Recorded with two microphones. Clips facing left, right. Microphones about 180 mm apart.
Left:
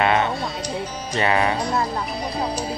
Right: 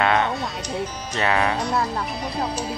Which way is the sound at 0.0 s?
5° left (ahead or behind).